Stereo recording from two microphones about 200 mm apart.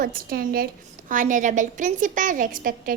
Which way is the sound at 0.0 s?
45° right (ahead or behind).